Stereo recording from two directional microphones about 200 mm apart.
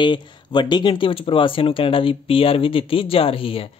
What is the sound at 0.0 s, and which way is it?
Speech, 25° left (ahead or behind).